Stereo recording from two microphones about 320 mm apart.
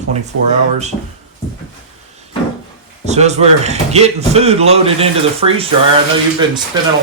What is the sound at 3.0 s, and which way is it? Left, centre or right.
Speech, right.